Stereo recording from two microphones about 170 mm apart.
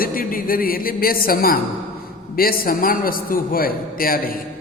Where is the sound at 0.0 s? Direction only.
55° left (ahead or behind).